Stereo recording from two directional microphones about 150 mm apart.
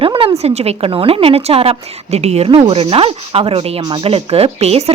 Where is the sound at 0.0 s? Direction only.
35° right (ahead or behind).